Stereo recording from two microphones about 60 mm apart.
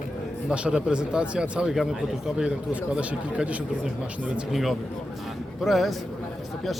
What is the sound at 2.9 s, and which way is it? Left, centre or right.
Speech, right.